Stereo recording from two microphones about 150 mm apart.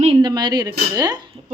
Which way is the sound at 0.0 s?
40° right (ahead or behind).